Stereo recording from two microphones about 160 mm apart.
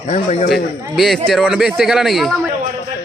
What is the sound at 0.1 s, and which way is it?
Speech, 45° left (ahead or behind).